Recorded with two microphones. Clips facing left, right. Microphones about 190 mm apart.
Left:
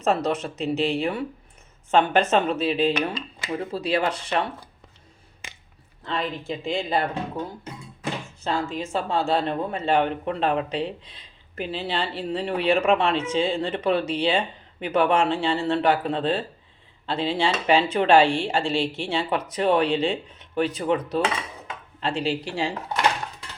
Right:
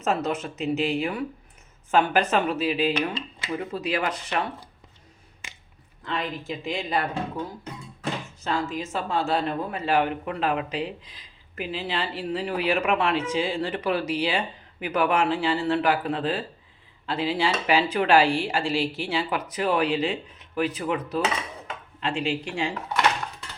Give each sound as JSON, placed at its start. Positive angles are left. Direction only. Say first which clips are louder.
{"t": 0.0, "sound": "speech", "louder": "left 3 dB", "side_deg": 30}
{"t": 2.9, "sound": "speech", "louder": "left 1 dB", "side_deg": 45}
{"t": 3.5, "sound": "speech", "louder": "left 3 dB", "side_deg": 30}
{"t": 6.1, "sound": "speech", "louder": "left 2 dB", "side_deg": 30}
{"t": 8.4, "sound": "speech", "louder": "left 1 dB", "side_deg": 30}